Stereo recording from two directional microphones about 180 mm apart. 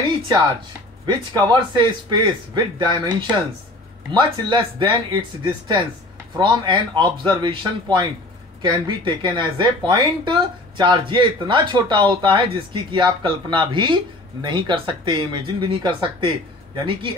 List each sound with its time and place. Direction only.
1.0 s speech: 25° right (ahead or behind)